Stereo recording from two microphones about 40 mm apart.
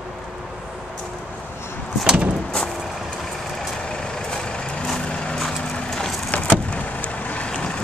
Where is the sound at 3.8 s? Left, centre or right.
Centre.